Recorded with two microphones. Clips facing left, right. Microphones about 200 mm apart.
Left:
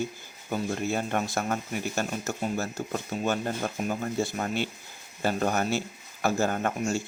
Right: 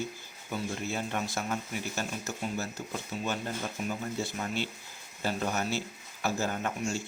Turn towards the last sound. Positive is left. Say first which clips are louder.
# left 5 dB
turn(degrees=55)  # may be behind; listen again after turning